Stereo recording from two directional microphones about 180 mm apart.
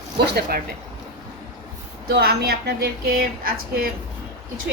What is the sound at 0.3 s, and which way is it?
Speech, 60° right (ahead or behind).